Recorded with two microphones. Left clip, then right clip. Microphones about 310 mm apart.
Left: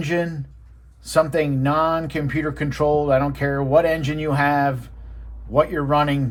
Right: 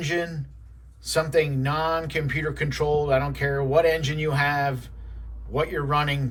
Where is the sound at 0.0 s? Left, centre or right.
Centre.